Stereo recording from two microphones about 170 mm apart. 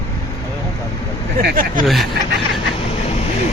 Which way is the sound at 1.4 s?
65° right (ahead or behind).